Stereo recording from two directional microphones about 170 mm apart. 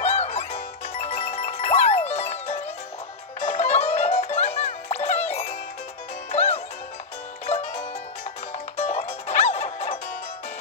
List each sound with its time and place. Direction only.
0.0 s music: 40° left (ahead or behind)
6.3 s music: 40° left (ahead or behind)